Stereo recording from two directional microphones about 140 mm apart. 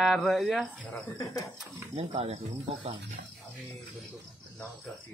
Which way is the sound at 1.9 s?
50° right (ahead or behind).